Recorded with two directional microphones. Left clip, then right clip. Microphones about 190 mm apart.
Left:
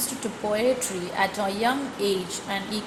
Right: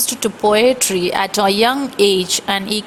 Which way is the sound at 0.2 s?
45° right (ahead or behind).